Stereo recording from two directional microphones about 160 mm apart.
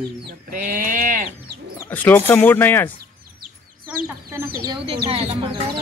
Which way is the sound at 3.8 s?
15° right (ahead or behind).